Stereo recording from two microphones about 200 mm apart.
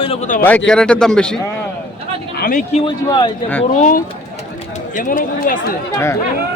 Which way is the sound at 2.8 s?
20° left (ahead or behind).